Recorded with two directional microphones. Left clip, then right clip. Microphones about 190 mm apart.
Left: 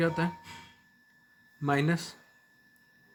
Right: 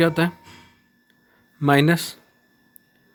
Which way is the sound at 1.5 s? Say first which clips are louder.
Right 11 dB; 55° right (ahead or behind).